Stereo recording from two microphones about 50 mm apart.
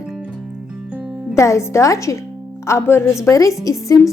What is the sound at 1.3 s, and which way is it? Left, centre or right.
Speech, left.